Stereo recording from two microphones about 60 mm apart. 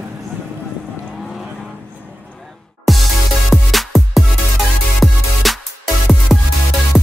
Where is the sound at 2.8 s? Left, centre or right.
Centre.